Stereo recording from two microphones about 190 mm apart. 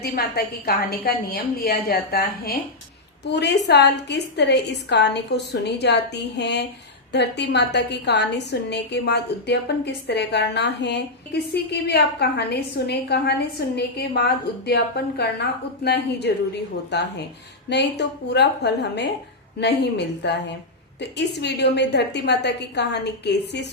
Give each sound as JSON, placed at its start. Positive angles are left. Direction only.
{"t": 0.0, "sound": "a woman's voice", "side_deg": 55}